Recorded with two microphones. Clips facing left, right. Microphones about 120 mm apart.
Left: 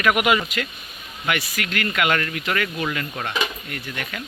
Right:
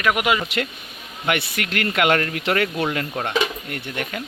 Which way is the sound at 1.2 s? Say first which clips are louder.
Right 2 dB; 65° right (ahead or behind).